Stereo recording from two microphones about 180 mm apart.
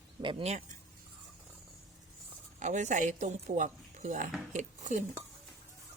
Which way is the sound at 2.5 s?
40° right (ahead or behind).